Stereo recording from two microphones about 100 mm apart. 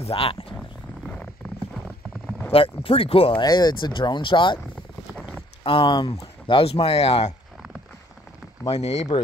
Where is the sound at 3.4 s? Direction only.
45° left (ahead or behind).